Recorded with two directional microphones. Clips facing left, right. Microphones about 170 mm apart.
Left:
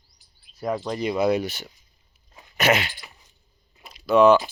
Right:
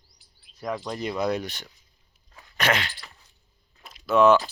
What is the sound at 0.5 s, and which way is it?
Speech, 5° left (ahead or behind).